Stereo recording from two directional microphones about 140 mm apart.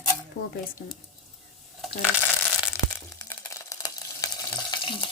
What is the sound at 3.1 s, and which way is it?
Frying, 20° left (ahead or behind).